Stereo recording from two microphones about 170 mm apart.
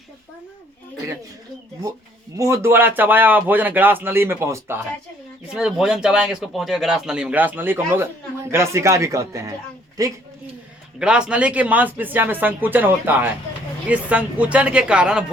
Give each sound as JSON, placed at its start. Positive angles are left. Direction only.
{"t": 2.3, "sound": "speech", "side_deg": -15}
{"t": 5.5, "sound": "a woman's voice", "side_deg": -5}
{"t": 11.0, "sound": "speech", "side_deg": -5}